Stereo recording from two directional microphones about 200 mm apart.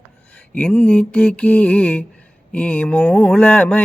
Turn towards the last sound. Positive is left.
turn(degrees=10)  # may be behind; listen again after turning